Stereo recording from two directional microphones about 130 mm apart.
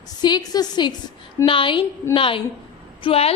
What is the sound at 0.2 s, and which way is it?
A woman's voice, 30° left (ahead or behind).